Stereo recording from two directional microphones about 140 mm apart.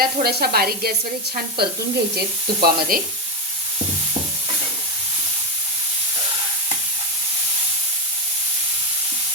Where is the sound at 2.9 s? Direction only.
90° right.